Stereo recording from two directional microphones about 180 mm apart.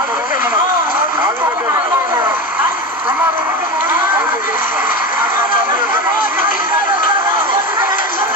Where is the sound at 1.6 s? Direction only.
10° right (ahead or behind).